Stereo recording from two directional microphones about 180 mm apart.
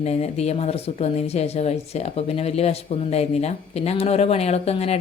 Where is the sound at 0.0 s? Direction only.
35° left (ahead or behind).